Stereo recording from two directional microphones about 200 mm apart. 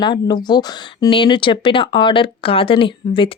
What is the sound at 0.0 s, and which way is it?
Speech, 20° left (ahead or behind).